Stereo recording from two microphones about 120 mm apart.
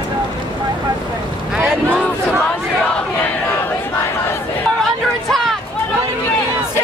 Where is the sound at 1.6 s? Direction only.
10° right (ahead or behind).